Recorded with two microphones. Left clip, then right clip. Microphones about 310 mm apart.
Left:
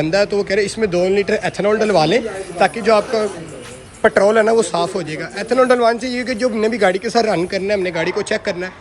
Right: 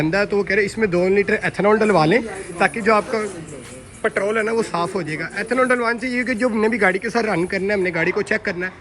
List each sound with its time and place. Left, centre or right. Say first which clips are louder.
0.0 s speech: left 3 dB; centre
4.0 s speech: left 8 dB; centre